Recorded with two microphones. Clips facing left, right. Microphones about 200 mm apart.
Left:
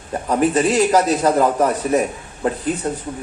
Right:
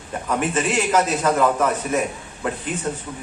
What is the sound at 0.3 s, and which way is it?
A man's voice, 35° left (ahead or behind).